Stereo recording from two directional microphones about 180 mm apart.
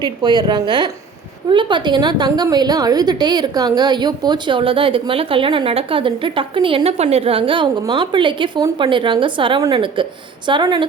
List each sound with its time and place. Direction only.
0.0 s a woman's voice: 25° right (ahead or behind)